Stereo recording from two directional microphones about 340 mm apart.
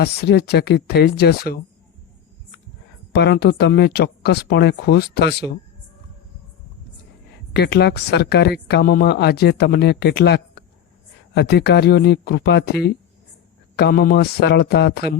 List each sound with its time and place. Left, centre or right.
0.0 s speech: left
3.2 s speech: left
7.5 s speech: left